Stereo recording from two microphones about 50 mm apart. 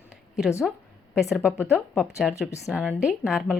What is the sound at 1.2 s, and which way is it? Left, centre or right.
Speech, centre.